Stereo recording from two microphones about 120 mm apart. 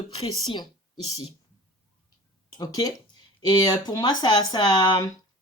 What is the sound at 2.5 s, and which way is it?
Speech, 30° left (ahead or behind).